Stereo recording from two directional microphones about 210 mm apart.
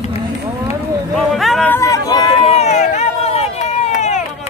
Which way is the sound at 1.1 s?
Centre (ahead or behind).